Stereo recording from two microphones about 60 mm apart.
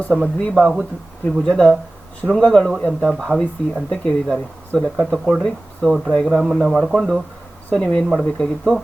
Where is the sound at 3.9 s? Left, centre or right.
Centre.